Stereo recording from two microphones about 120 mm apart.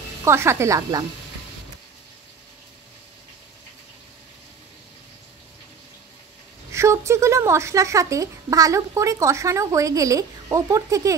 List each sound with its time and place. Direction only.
0.2 s a woman's voice: 20° right (ahead or behind)
6.7 s a woman's voice: 25° right (ahead or behind)